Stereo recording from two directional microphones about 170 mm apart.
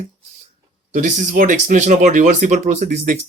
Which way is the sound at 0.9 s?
50° right (ahead or behind).